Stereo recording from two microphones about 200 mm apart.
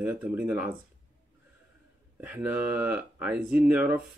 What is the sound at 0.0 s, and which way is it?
Speech, 10° right (ahead or behind).